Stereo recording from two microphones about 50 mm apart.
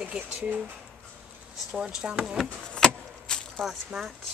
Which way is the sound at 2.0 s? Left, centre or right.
Right.